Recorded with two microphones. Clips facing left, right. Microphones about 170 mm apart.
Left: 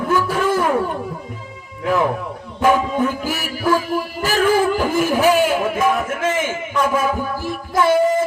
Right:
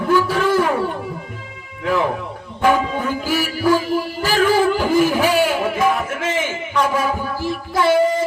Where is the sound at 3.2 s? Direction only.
50° left (ahead or behind).